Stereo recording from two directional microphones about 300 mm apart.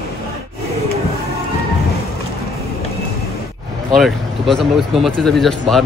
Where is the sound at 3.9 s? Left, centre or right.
Centre.